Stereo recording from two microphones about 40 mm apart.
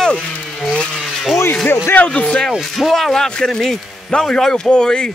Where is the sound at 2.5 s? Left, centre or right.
Centre.